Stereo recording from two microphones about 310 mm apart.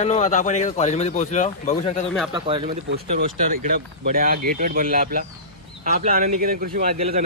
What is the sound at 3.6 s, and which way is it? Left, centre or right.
Speech, right.